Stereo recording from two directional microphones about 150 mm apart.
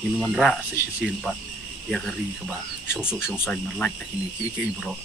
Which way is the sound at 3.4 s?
5° left (ahead or behind).